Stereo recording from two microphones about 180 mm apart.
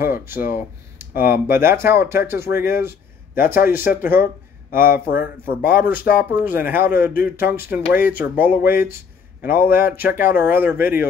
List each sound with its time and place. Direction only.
0.0 s speech: 10° right (ahead or behind)
5.2 s speech: 50° left (ahead or behind)
6.1 s speech: 10° right (ahead or behind)
6.9 s speech: 55° left (ahead or behind)
7.3 s speech: 10° right (ahead or behind)